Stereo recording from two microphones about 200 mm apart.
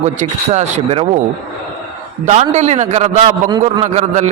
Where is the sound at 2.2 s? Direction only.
35° right (ahead or behind).